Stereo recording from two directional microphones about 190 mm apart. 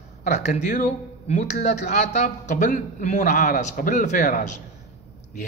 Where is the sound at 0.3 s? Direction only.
35° left (ahead or behind).